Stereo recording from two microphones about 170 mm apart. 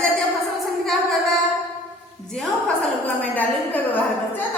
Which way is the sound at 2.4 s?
5° left (ahead or behind).